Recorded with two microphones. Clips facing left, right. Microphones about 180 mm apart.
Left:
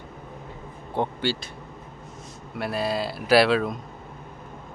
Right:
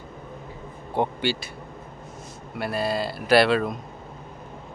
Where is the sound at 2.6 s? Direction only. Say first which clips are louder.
Right 1 dB; centre (ahead or behind).